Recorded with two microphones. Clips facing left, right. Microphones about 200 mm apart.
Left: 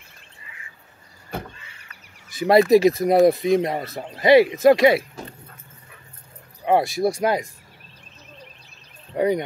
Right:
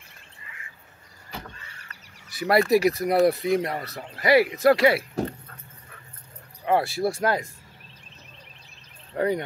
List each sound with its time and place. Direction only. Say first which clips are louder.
2.3 s speech: left 5 dB; 20° left (ahead or behind)
6.6 s speech: left 4 dB; 20° left (ahead or behind)
9.1 s speech: left 4 dB; 15° left (ahead or behind)